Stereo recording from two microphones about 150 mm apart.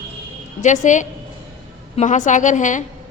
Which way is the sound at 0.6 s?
55° left (ahead or behind).